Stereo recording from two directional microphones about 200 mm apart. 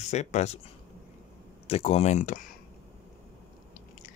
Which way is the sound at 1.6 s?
30° left (ahead or behind).